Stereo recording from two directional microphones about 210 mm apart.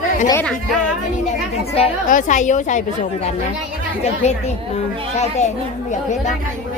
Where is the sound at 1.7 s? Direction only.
35° left (ahead or behind).